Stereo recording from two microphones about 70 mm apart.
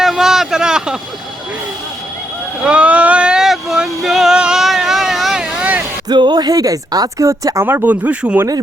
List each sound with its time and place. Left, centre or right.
0.0 s a sound: centre
2.6 s vehicle: centre
6.1 s speech: right
7.3 s speech: right
7.9 s speech: centre